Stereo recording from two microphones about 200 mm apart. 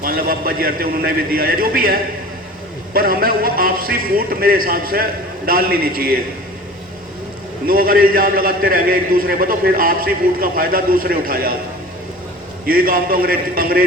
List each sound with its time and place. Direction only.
0.0 s a man's voice: 45° right (ahead or behind)
7.7 s a man's voice: 45° right (ahead or behind)
12.6 s a man's voice: 45° right (ahead or behind)